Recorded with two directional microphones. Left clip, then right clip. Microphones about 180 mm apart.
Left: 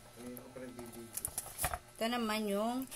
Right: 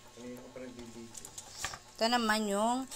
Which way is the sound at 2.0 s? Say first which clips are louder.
Right 7 dB; 20° right (ahead or behind).